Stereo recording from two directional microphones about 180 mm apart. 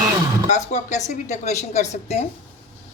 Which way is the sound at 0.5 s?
40° left (ahead or behind).